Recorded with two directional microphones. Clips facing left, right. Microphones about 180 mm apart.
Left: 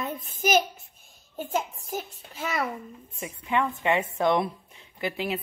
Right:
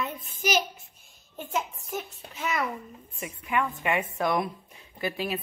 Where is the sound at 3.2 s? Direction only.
25° left (ahead or behind).